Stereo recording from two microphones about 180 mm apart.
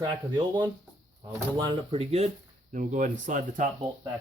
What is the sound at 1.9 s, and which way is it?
Speech, 35° right (ahead or behind).